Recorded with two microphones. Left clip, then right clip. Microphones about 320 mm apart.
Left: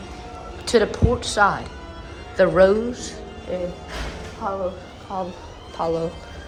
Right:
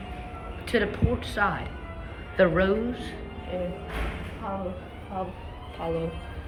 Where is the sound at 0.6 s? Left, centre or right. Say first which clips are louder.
Left 8 dB; centre.